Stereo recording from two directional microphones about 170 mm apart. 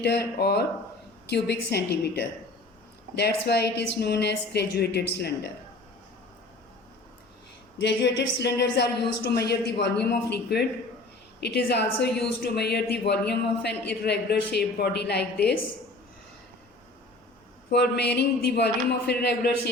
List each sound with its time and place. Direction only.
0.0 s speech: 75° left (ahead or behind)
7.8 s a woman's voice: 90° left
17.7 s speech: 75° left (ahead or behind)